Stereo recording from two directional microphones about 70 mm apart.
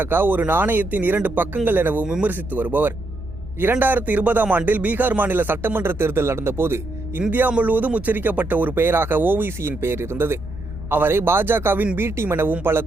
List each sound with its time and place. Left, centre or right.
0.0 s a man's voice: right
7.2 s a man's voice: right